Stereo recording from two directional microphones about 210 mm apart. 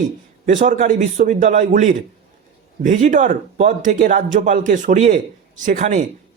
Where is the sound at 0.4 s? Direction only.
40° right (ahead or behind).